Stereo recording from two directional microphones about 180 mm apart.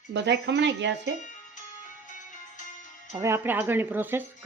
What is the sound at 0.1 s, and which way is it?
Speech, 75° right (ahead or behind).